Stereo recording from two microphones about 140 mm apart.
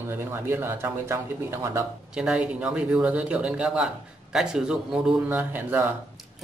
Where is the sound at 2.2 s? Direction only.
5° right (ahead or behind).